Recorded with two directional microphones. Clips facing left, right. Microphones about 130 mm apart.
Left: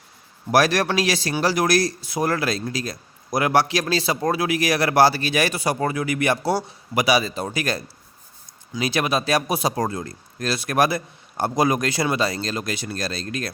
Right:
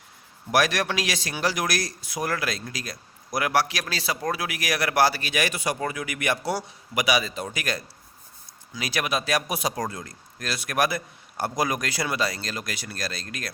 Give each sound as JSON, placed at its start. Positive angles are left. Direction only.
{"t": 0.5, "sound": "speech", "side_deg": 35}